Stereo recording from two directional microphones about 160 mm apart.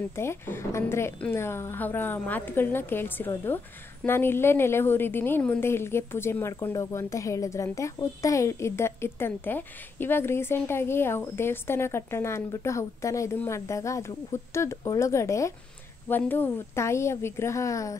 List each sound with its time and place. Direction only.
0.1 s a woman's voice: 15° left (ahead or behind)